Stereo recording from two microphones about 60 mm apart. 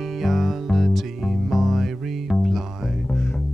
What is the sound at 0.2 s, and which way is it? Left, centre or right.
Music, centre.